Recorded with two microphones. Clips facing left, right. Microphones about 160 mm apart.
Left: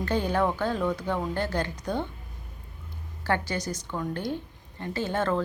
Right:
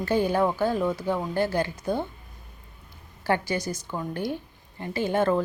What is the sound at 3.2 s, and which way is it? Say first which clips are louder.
A woman's voice: right 2 dB; 10° right (ahead or behind).